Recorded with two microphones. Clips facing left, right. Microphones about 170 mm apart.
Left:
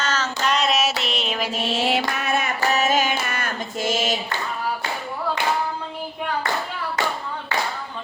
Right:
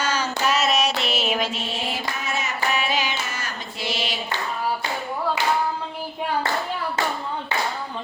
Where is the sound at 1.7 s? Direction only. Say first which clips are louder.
Left 6 dB; 80° left; by 2.5 s 60° left (ahead or behind).